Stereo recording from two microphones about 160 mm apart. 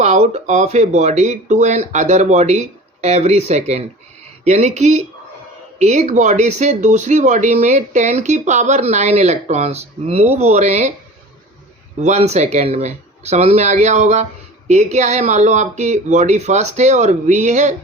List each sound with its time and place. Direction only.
0.0 s speech: 45° right (ahead or behind)
11.9 s speech: 45° right (ahead or behind)